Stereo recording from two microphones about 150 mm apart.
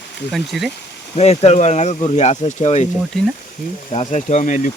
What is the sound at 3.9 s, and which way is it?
Speech, 45° left (ahead or behind).